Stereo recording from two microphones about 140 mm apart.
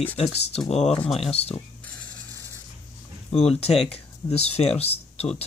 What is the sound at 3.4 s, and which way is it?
Speech, 45° left (ahead or behind).